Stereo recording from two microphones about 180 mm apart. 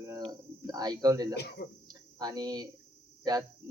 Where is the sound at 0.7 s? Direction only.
20° right (ahead or behind).